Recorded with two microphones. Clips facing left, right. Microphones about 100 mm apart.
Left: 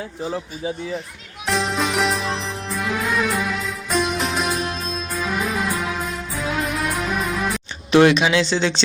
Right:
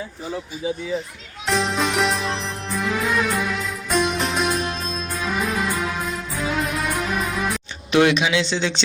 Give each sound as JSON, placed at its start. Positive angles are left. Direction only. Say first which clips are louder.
{"t": 1.5, "sound": "music", "louder": "even", "side_deg": 0}
{"t": 7.9, "sound": "speech", "louder": "left 3 dB", "side_deg": 40}